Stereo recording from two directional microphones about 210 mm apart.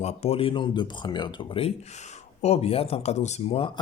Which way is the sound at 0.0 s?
30° left (ahead or behind).